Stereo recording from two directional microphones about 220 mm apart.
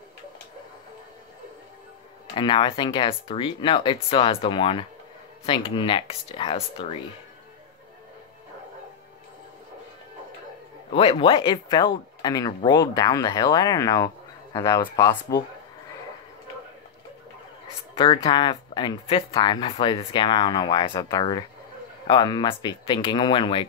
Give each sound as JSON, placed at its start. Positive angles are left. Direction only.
{"t": 2.3, "sound": "speech", "side_deg": 25}
{"t": 10.9, "sound": "speech", "side_deg": 25}
{"t": 17.9, "sound": "speech", "side_deg": 20}